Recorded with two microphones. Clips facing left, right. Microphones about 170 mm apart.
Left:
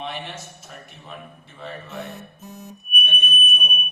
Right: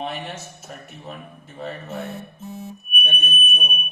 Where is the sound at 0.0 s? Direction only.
45° right (ahead or behind).